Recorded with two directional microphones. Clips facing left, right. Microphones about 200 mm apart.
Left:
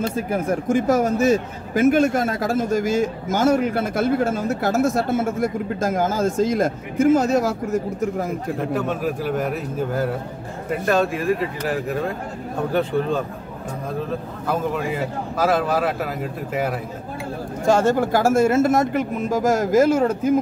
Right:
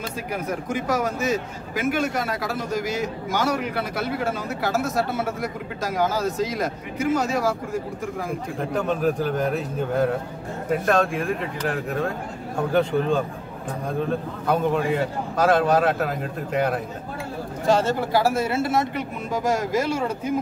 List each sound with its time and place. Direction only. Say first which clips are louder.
0.1 s speech: left 6 dB; 50° left (ahead or behind)
8.7 s a man's voice: right 5 dB; 5° left (ahead or behind)
14.5 s a man's voice: right 2 dB; centre (ahead or behind)
17.6 s speech: left 4 dB; 50° left (ahead or behind)